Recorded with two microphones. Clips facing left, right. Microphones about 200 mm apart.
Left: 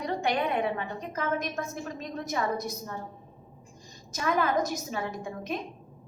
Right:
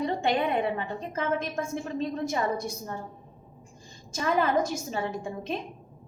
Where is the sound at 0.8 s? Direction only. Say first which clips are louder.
Right 2 dB; 30° right (ahead or behind).